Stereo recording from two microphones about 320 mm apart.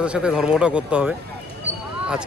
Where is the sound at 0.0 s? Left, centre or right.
Centre.